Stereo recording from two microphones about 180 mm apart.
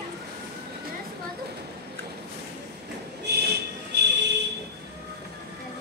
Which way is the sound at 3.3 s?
65° right (ahead or behind).